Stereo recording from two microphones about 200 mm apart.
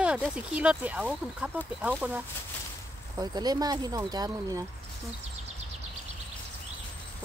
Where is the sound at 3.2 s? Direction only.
20° right (ahead or behind).